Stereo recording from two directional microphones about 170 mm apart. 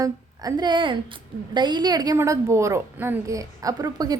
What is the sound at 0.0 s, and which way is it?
A woman's voice, 20° right (ahead or behind).